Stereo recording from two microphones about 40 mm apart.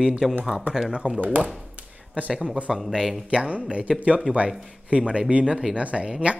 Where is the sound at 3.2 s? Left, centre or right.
Right.